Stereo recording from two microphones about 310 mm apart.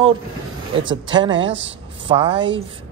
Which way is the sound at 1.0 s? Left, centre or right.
Centre.